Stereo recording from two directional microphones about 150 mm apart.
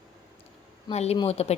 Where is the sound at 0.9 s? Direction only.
45° left (ahead or behind).